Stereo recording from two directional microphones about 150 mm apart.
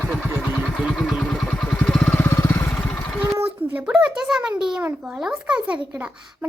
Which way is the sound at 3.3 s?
10° right (ahead or behind).